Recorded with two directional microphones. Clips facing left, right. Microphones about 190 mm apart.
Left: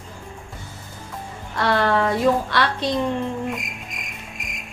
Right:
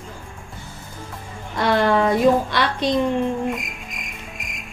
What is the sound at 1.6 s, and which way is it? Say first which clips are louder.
A woman's voice: right 2 dB; 15° right (ahead or behind).